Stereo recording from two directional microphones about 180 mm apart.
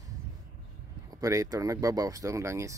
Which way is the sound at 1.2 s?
20° right (ahead or behind).